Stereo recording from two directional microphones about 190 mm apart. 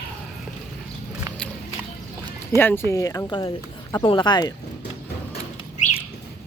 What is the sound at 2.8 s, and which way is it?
Speech, 15° left (ahead or behind).